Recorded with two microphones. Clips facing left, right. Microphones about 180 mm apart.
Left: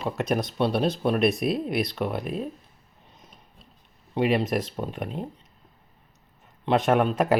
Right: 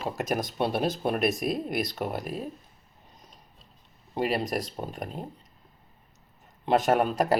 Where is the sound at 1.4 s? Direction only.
45° right (ahead or behind).